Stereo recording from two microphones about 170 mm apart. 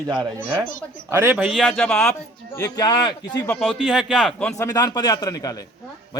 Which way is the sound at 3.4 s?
5° left (ahead or behind).